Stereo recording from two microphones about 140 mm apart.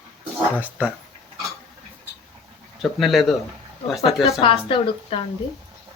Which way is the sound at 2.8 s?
Centre (ahead or behind).